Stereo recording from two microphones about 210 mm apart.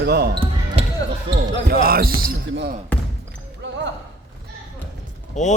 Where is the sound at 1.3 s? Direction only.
50° right (ahead or behind).